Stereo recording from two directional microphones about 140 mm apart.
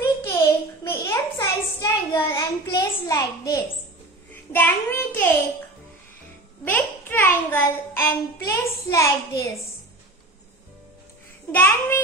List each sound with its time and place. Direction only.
0.0 s a sound: 20° left (ahead or behind)
2.3 s a child's voice: 25° left (ahead or behind)
4.3 s a child's voice: 15° left (ahead or behind)
6.6 s a child's voice: 15° left (ahead or behind)
11.5 s a child's voice: 15° left (ahead or behind)